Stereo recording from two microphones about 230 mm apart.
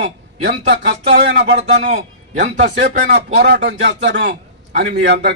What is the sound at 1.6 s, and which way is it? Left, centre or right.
Speech, right.